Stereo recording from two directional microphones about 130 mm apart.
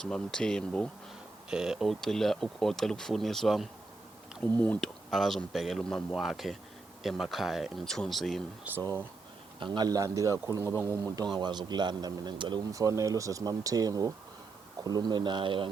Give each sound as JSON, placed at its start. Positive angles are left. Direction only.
{"t": 0.0, "sound": "speech", "side_deg": 5}
{"t": 1.5, "sound": "speech", "side_deg": -5}
{"t": 4.5, "sound": "speech", "side_deg": 10}
{"t": 8.7, "sound": "speech", "side_deg": -10}
{"t": 9.6, "sound": "a man's voice", "side_deg": -35}